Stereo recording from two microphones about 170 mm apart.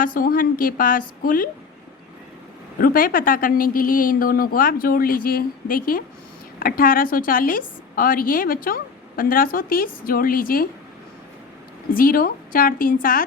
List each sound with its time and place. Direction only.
0.0 s a woman's voice: 55° left (ahead or behind)
2.7 s a woman's voice: 55° left (ahead or behind)
11.9 s a woman's voice: 55° left (ahead or behind)